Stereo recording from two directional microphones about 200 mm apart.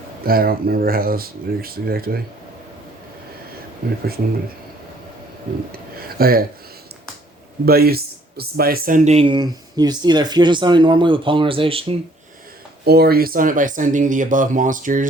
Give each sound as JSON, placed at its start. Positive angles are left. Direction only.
{"t": 0.3, "sound": "speech", "side_deg": -45}
{"t": 6.1, "sound": "speech", "side_deg": -50}
{"t": 7.6, "sound": "speech", "side_deg": -50}
{"t": 9.0, "sound": "speech", "side_deg": -30}
{"t": 12.8, "sound": "speech", "side_deg": -50}